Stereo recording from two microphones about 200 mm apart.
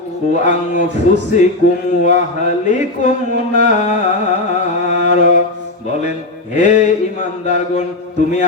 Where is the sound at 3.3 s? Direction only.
60° right (ahead or behind).